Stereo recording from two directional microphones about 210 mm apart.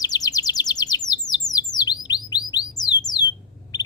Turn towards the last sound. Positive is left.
turn(degrees=20)  # may be behind; listen again after turning